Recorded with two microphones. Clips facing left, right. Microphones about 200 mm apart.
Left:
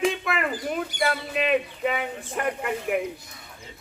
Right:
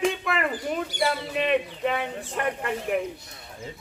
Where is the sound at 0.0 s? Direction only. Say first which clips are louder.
Even; 5° left (ahead or behind).